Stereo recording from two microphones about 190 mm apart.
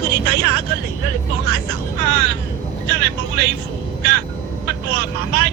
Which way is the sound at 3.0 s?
60° right (ahead or behind).